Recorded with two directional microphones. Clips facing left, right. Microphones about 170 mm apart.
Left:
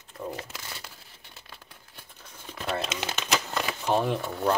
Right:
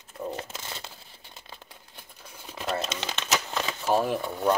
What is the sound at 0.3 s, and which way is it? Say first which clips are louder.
Crumpling: right 2 dB; 25° right (ahead or behind).